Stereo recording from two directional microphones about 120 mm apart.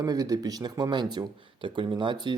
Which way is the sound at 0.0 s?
30° right (ahead or behind).